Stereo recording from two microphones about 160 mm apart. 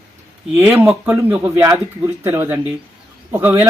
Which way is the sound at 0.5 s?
10° right (ahead or behind).